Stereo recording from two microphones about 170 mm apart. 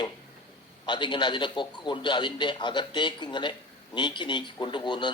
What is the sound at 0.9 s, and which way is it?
A man's voice, 30° left (ahead or behind).